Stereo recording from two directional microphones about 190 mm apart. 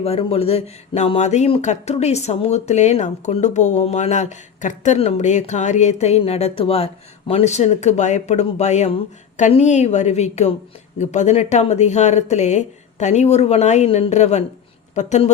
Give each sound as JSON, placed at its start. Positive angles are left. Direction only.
{"t": 0.0, "sound": "speech", "side_deg": 30}